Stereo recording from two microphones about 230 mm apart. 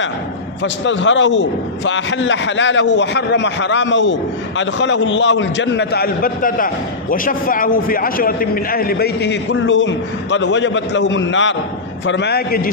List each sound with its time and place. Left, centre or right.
0.8 s a man's voice: left